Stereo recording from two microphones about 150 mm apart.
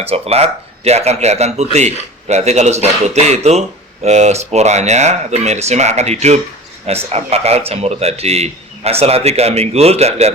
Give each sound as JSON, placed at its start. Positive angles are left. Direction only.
{"t": 0.0, "sound": "speech", "side_deg": -40}